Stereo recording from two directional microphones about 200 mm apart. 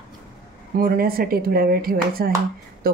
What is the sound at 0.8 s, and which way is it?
Speech, 45° right (ahead or behind).